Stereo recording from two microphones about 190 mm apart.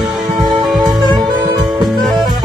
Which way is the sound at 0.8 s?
20° right (ahead or behind).